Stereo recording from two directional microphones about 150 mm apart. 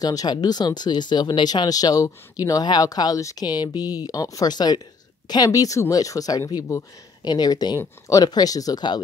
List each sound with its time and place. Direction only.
0.0 s speech: 25° left (ahead or behind)